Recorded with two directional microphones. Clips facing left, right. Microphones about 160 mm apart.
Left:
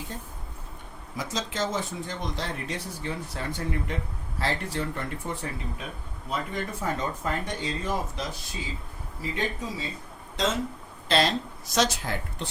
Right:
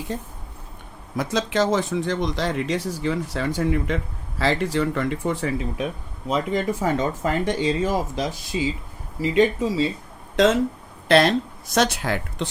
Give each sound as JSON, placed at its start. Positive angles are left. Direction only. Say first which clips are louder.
{"t": 1.1, "sound": "speech", "louder": "right 9 dB", "side_deg": -65}
{"t": 10.4, "sound": "speech", "louder": "right 10 dB", "side_deg": -65}